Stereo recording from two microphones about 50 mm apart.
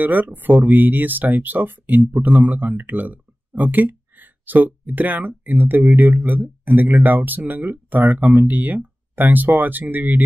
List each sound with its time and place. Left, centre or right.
0.0 s speech: right